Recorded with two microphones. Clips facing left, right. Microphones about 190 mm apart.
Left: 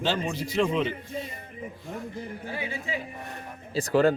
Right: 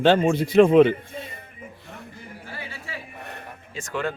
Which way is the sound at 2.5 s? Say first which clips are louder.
Left 5 dB; 15° left (ahead or behind).